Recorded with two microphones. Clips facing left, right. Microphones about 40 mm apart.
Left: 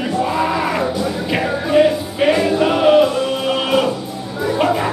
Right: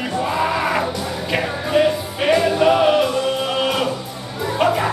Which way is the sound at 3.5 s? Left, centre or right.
Centre.